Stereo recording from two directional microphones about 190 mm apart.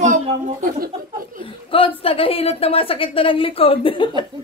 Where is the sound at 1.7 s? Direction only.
30° left (ahead or behind).